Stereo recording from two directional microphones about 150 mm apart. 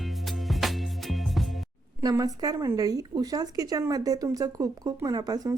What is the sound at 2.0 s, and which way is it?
Speech, 25° right (ahead or behind).